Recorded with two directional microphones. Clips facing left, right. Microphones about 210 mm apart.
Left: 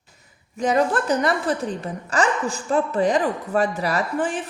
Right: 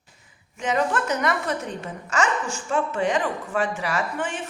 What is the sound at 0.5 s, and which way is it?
A woman's voice, 35° left (ahead or behind).